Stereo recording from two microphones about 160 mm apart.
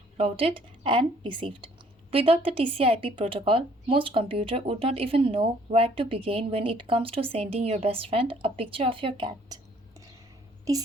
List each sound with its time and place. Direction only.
0.2 s speech: 40° right (ahead or behind)
10.7 s speech: 20° right (ahead or behind)